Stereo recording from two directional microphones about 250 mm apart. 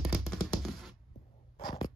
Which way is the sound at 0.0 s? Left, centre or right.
Centre.